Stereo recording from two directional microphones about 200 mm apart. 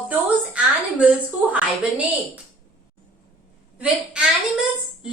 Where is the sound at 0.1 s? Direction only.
5° right (ahead or behind).